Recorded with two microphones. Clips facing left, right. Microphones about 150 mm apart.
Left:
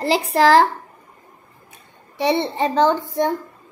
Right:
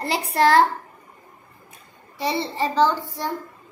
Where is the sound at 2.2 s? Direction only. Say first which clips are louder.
Left 5 dB; 60° left (ahead or behind).